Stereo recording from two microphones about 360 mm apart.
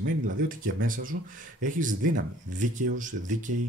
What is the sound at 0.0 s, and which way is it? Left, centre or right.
Speech, right.